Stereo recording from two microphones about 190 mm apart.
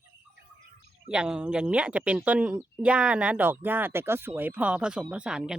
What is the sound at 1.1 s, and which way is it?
Speech, 5° right (ahead or behind).